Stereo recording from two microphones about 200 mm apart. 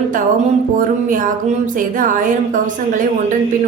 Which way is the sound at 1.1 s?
40° right (ahead or behind).